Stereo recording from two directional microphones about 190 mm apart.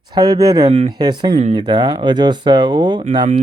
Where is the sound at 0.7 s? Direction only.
35° right (ahead or behind).